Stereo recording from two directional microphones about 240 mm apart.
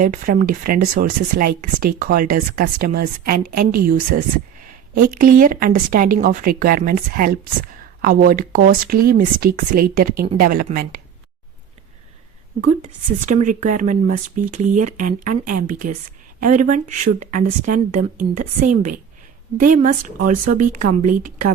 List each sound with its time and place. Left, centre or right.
0.0 s speech: right
12.6 s speech: right